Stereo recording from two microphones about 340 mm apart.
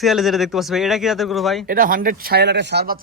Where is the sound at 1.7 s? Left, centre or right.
Right.